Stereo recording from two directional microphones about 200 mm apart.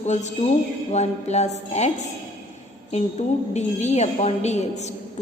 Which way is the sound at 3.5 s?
35° left (ahead or behind).